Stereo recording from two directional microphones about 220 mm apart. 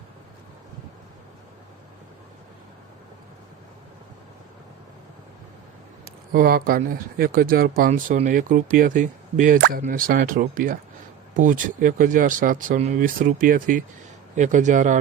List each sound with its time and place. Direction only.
6.3 s speech: 40° right (ahead or behind)
9.6 s speech: 50° right (ahead or behind)